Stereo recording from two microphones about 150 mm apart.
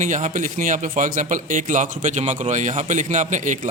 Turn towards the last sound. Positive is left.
turn(degrees=-55)  # may be behind; listen again after turning